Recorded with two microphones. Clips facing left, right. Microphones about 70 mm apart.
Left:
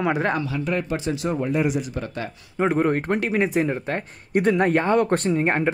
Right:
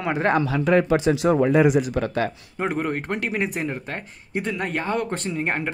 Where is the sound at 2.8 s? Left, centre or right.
Left.